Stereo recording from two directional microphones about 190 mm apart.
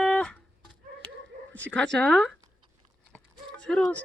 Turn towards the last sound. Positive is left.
turn(degrees=5)  # may be behind; listen again after turning